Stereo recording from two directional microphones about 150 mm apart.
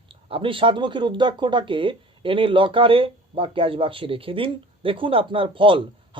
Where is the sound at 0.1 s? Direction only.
35° right (ahead or behind).